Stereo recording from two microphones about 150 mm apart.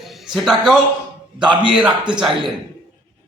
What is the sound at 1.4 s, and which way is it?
Speech, 30° right (ahead or behind).